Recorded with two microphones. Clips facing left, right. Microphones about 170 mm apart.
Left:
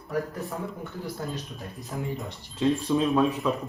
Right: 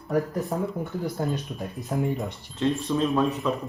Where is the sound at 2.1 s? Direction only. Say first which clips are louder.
Right 4 dB; 5° left (ahead or behind).